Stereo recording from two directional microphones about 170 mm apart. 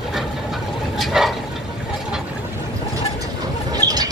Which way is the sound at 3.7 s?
20° right (ahead or behind).